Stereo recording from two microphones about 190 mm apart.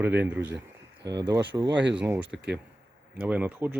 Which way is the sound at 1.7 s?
70° right (ahead or behind).